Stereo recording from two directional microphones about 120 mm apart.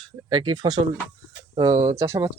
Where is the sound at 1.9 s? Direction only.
25° right (ahead or behind).